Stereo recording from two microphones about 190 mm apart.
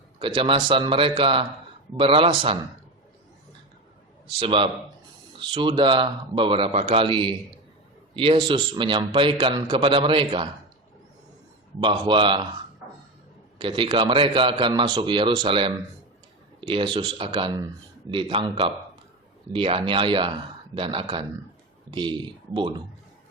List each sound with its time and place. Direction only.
0.2 s a man's voice: 30° right (ahead or behind)
4.4 s a man's voice: 30° right (ahead or behind)
11.8 s a man's voice: 25° right (ahead or behind)
13.6 s a man's voice: 25° right (ahead or behind)